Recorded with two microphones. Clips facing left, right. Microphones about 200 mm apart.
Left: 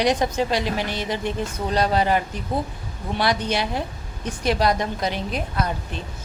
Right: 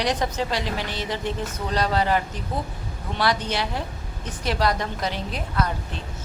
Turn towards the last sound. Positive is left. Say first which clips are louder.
# left 1 dB
turn(degrees=15)  # may be behind; listen again after turning